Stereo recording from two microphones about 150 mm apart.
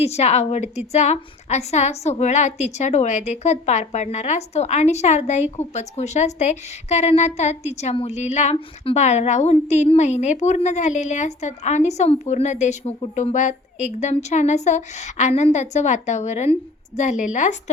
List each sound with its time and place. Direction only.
0.0 s a woman's voice: 45° left (ahead or behind)